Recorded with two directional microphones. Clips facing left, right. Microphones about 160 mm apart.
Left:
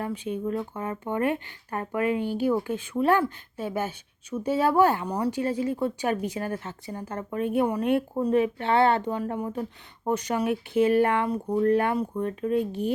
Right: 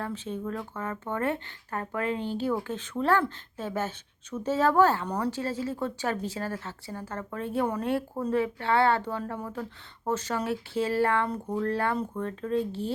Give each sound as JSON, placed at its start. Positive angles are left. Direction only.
{"t": 0.0, "sound": "speech", "side_deg": 15}